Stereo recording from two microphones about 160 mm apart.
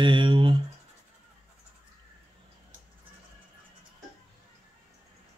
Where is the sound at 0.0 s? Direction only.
30° right (ahead or behind).